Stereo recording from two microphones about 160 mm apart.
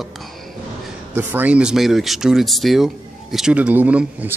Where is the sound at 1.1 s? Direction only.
10° right (ahead or behind).